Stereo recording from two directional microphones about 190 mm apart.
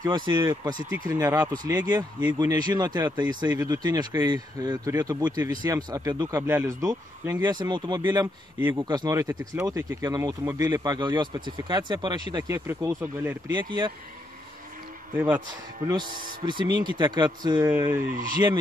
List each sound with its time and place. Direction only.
0.0 s speech: 20° right (ahead or behind)
8.5 s speech: 10° right (ahead or behind)
8.8 s speech: 20° right (ahead or behind)
12.5 s speech: 10° right (ahead or behind)
13.6 s speech: 25° right (ahead or behind)
15.1 s speech: 10° right (ahead or behind)
16.4 s speech: 25° right (ahead or behind)
17.6 s speech: 10° right (ahead or behind)